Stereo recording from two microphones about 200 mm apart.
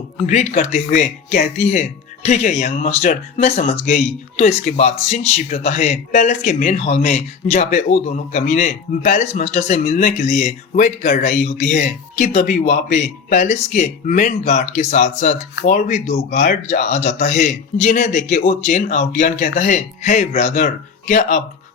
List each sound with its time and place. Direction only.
0.3 s speech: 35° left (ahead or behind)